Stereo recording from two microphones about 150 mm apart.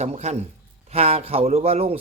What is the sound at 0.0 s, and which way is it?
A man's voice, 50° right (ahead or behind).